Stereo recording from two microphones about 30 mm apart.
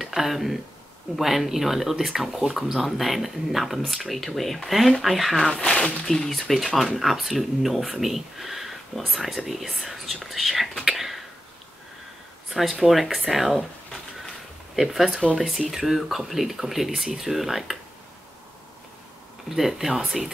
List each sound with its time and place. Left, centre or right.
0.0 s speech: centre
5.7 s speech: left
6.0 s speech: centre
10.8 s whispering: centre
12.4 s speech: centre
14.8 s speech: centre
19.5 s speech: centre